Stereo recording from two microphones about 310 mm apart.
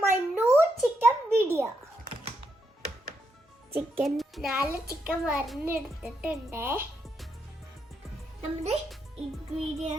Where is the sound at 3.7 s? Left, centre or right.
Centre.